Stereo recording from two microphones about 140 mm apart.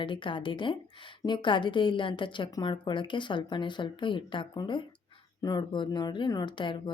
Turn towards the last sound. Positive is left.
turn(degrees=35)  # may be behind; listen again after turning